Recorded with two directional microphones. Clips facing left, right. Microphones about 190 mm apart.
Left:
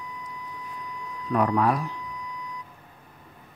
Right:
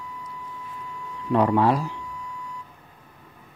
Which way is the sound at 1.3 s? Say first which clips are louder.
Right 3 dB; 30° right (ahead or behind).